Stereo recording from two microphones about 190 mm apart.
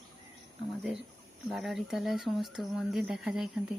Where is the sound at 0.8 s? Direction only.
Centre (ahead or behind).